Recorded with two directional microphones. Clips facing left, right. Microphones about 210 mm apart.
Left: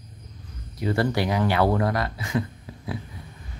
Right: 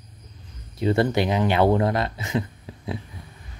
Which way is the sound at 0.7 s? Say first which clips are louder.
Right 3 dB; 25° right (ahead or behind).